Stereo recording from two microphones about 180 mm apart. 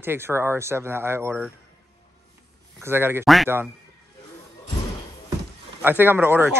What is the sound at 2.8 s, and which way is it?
Speech, 10° right (ahead or behind).